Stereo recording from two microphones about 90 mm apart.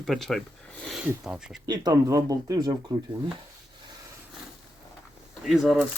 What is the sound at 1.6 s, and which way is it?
Speech, 45° right (ahead or behind).